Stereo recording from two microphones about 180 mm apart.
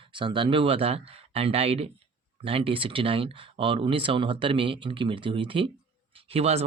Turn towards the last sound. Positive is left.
turn(degrees=-35)  # may be behind; listen again after turning